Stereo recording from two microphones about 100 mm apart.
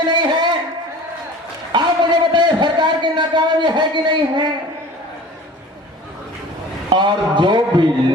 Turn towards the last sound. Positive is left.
turn(degrees=-50)  # may be behind; listen again after turning